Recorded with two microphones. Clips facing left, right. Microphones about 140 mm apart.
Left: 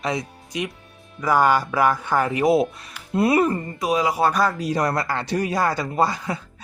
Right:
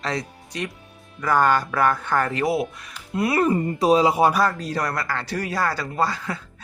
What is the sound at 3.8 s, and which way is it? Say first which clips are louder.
Speech: right 5 dB; 30° right (ahead or behind).